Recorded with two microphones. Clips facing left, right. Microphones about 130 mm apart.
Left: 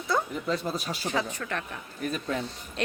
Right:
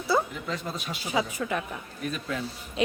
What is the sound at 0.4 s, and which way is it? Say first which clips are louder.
Speech: left 4 dB; 40° left (ahead or behind).